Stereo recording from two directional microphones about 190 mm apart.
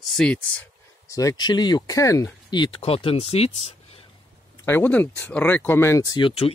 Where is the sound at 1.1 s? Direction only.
20° left (ahead or behind).